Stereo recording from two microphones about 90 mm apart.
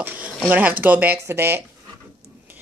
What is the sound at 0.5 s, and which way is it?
A woman's voice, 20° right (ahead or behind).